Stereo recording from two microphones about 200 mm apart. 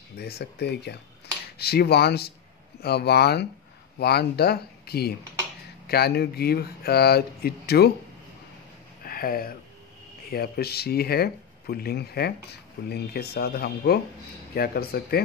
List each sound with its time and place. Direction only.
0.2 s speech: 55° left (ahead or behind)
9.0 s speech: 45° left (ahead or behind)